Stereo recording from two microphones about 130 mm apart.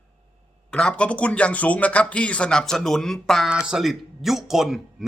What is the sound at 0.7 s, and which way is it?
Speech, 10° left (ahead or behind).